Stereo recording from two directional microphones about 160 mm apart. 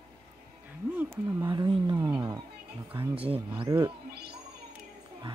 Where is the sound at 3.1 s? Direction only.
35° right (ahead or behind).